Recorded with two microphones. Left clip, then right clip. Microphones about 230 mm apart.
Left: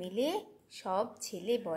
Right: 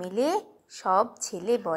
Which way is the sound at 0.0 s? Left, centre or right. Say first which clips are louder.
Right 7 dB; centre.